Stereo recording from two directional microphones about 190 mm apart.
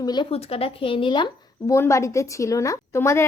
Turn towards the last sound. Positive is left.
turn(degrees=15)  # may be behind; listen again after turning